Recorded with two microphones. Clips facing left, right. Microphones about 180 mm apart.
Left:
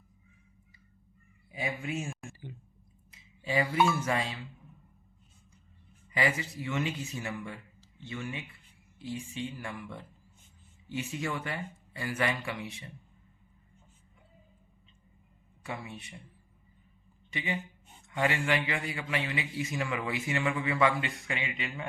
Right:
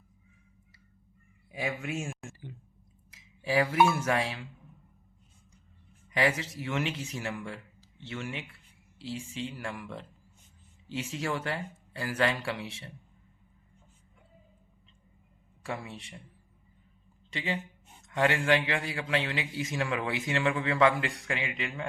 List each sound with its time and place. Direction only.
1.8 s a man's voice: 85° right
3.1 s a sound: 85° right
4.0 s speech: 75° right (ahead or behind)
6.1 s a man's voice: 85° right
11.1 s a man's voice: 85° right
15.6 s a man's voice: 80° right
17.3 s a man's voice: 80° right